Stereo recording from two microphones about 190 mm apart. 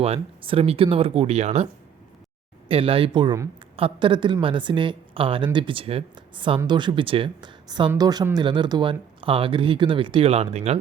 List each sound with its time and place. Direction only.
0.0 s speech: 30° right (ahead or behind)
2.6 s speech: 30° right (ahead or behind)